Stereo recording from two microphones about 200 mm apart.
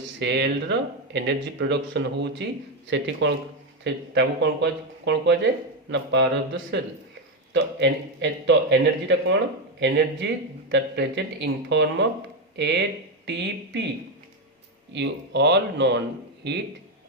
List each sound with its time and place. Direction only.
0.2 s speech: 60° right (ahead or behind)
10.7 s speech: 60° right (ahead or behind)
14.9 s speech: 60° right (ahead or behind)